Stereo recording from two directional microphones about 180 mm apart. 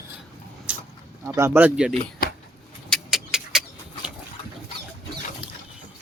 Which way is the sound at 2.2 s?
55° left (ahead or behind).